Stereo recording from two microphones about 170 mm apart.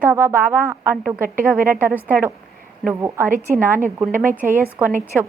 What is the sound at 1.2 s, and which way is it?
Speech, 55° right (ahead or behind).